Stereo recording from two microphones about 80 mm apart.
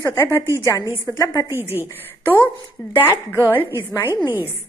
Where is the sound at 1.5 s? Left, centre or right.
Right.